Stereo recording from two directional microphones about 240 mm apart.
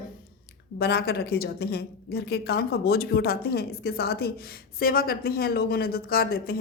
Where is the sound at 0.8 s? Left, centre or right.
Left.